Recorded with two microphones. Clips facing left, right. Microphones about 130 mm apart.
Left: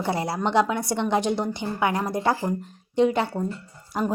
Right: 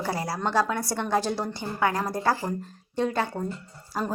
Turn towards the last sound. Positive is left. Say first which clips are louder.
# left 4 dB
turn(degrees=20)  # may be behind; listen again after turning